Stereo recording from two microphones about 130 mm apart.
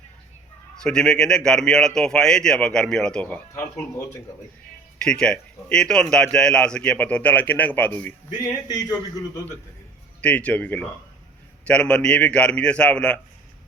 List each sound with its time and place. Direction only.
0.8 s speech: 5° left (ahead or behind)
3.5 s a man's voice: 20° left (ahead or behind)
5.0 s a man's voice: 5° left (ahead or behind)
8.6 s a man's voice: 30° left (ahead or behind)
10.2 s a man's voice: 10° left (ahead or behind)